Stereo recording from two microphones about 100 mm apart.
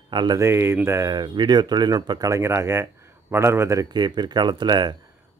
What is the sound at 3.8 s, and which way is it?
Speech, 45° right (ahead or behind).